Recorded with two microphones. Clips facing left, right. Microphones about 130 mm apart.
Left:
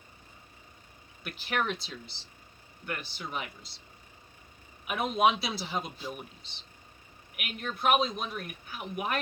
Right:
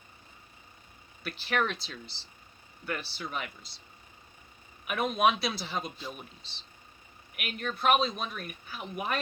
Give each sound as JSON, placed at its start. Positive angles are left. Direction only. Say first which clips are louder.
{"t": 1.2, "sound": "speech", "louder": "right 2 dB", "side_deg": 15}
{"t": 4.9, "sound": "a man's voice", "louder": "even", "side_deg": 20}
{"t": 7.3, "sound": "speech", "louder": "right 2 dB", "side_deg": 15}